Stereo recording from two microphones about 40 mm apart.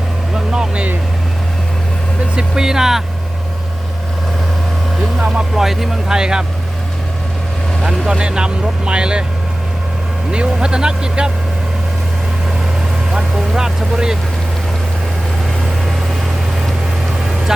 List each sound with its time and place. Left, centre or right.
0.3 s vehicle: centre
2.3 s speech: centre
5.5 s speech: centre
7.9 s speech: centre
10.3 s speech: right
13.3 s speech: centre